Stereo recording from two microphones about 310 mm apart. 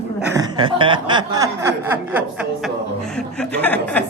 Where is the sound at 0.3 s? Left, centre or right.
Centre.